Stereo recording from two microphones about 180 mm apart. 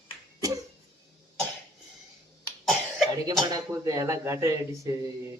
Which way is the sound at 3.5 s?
20° right (ahead or behind).